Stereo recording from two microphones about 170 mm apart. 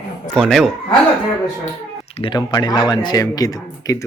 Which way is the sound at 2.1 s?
30° left (ahead or behind).